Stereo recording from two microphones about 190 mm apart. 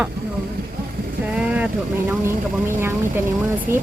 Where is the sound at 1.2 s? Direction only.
5° right (ahead or behind).